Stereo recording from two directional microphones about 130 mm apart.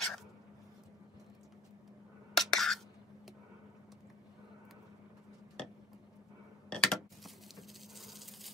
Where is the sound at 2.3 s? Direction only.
Centre (ahead or behind).